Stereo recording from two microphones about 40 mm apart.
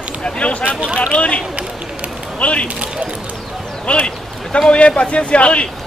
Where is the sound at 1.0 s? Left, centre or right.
Left.